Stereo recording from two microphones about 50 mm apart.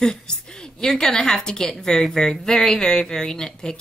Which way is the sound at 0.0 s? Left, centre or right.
Centre.